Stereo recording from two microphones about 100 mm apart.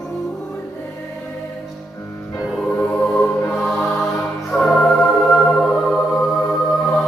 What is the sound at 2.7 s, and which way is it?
Music, 20° left (ahead or behind).